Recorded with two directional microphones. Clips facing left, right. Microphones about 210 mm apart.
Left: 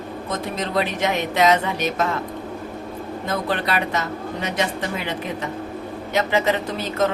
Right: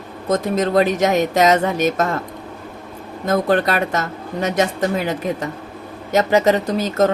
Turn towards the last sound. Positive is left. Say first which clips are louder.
# right 5 dB
turn(degrees=-40)  # may be behind; listen again after turning